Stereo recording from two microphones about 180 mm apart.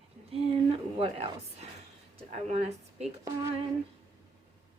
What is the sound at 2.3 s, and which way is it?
Speech, 40° right (ahead or behind).